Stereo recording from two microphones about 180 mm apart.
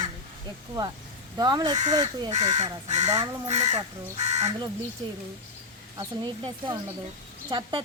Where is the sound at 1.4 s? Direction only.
20° right (ahead or behind).